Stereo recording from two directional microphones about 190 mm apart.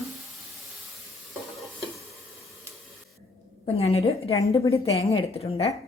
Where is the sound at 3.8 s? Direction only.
30° left (ahead or behind).